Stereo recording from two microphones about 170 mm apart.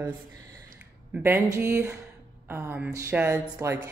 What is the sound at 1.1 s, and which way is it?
Speech, 10° right (ahead or behind).